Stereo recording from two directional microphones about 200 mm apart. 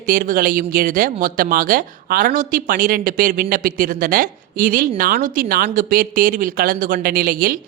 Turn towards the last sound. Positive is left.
turn(degrees=-45)  # may be behind; listen again after turning